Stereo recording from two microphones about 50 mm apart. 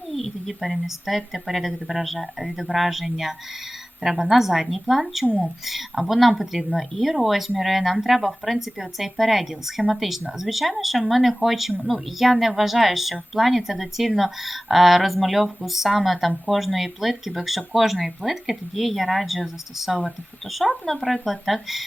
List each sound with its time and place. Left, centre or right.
0.1 s speech: centre